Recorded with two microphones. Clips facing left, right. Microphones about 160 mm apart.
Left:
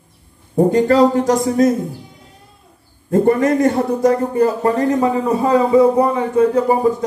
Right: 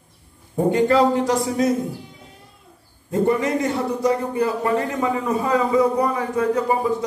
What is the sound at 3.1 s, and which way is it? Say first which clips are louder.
A man's voice: left 6 dB; 50° left (ahead or behind).